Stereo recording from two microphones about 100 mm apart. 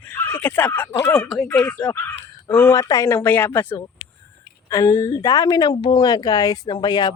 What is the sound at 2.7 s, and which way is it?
Speech, 30° left (ahead or behind).